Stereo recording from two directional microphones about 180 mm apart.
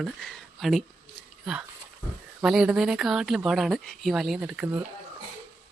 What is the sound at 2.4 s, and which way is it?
A woman's voice, 5° right (ahead or behind).